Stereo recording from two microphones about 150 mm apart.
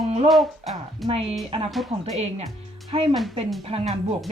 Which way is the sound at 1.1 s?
40° right (ahead or behind).